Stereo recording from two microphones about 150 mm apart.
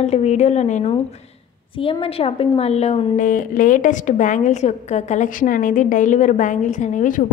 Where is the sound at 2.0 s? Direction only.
40° left (ahead or behind).